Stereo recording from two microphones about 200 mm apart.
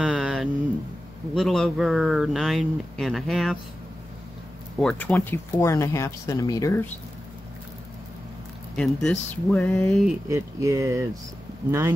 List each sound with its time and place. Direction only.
0.0 s a sound: 5° right (ahead or behind)
1.3 s speech: centre (ahead or behind)
4.7 s speech: 5° left (ahead or behind)
8.7 s speech: 5° left (ahead or behind)
10.2 s speech: 15° right (ahead or behind)